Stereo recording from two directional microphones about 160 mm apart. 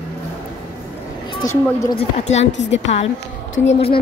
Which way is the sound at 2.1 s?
45° left (ahead or behind).